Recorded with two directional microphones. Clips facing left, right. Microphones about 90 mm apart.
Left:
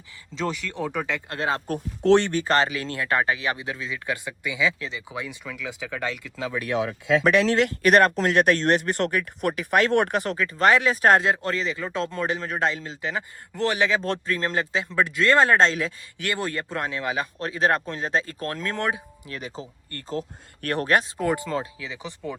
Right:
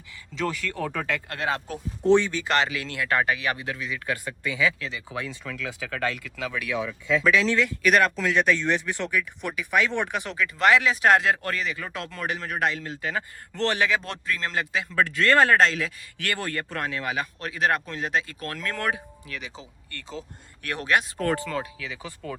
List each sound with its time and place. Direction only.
0.3 s speech: 20° left (ahead or behind)
2.0 s speech: 80° left
2.3 s speech: 35° left (ahead or behind)
6.7 s speech: 80° left
7.8 s speech: 45° left (ahead or behind); by 13.9 s 15° left (ahead or behind)
13.9 s speech: 35° left (ahead or behind)
19.4 s speech: 40° left (ahead or behind)
21.2 s speech: 15° left (ahead or behind)